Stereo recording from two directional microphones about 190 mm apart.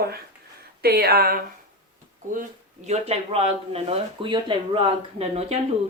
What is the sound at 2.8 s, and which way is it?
A woman's voice, 35° right (ahead or behind).